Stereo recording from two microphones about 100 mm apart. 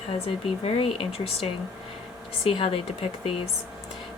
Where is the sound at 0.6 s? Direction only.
70° left (ahead or behind).